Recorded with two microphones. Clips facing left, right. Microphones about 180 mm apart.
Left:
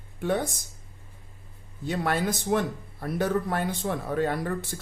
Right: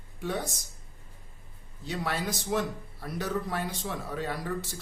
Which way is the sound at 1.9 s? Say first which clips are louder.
Left 5 dB; 55° left (ahead or behind).